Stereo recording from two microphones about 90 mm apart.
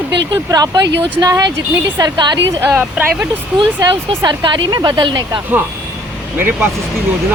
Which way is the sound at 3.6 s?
60° right (ahead or behind).